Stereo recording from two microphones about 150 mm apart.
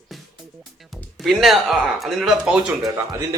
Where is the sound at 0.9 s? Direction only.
Centre (ahead or behind).